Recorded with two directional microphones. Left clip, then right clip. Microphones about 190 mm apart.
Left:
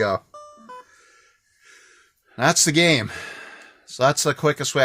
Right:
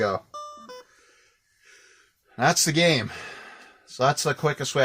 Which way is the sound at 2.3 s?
50° left (ahead or behind).